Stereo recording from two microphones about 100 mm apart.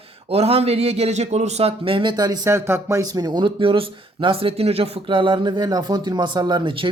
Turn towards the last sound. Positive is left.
turn(degrees=-60)  # may be behind; listen again after turning